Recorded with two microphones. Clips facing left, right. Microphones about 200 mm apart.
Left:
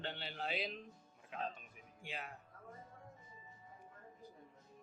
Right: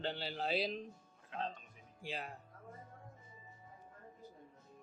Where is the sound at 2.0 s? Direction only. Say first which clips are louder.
Right 4 dB; 35° right (ahead or behind).